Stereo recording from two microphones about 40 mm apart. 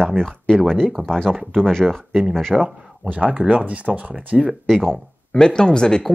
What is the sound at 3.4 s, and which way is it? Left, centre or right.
Speech, right.